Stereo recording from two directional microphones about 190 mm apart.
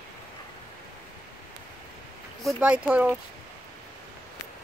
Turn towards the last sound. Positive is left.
turn(degrees=-5)  # may be behind; listen again after turning